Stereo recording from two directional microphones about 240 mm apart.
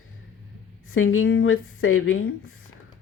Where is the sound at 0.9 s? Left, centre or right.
Left.